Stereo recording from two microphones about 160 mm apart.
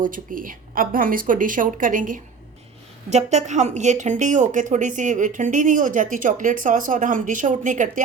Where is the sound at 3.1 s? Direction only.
45° right (ahead or behind).